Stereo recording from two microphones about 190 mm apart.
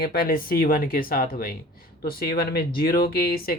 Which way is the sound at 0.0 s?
50° left (ahead or behind).